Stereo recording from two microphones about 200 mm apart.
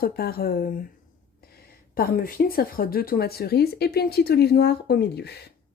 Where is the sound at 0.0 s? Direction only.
50° left (ahead or behind).